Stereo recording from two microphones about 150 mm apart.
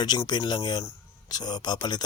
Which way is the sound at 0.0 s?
30° left (ahead or behind).